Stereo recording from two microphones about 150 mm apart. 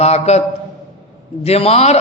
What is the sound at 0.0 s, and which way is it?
Speech, 45° left (ahead or behind).